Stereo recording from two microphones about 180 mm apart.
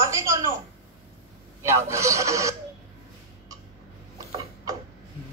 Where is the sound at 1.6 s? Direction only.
15° right (ahead or behind).